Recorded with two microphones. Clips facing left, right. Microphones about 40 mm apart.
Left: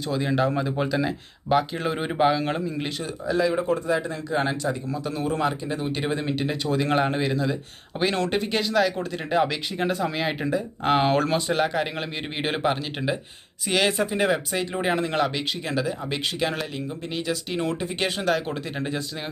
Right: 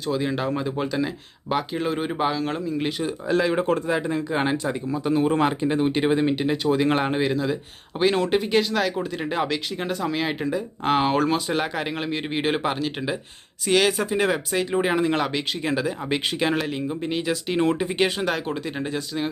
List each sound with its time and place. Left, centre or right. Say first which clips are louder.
0.1 s speech: left 1 dB; centre
3.3 s speech: right 1 dB; right
4.0 s speech: right 2 dB; right
6.0 s speech: right 5 dB; centre